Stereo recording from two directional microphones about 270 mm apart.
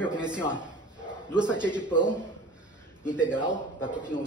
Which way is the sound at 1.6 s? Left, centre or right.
Centre.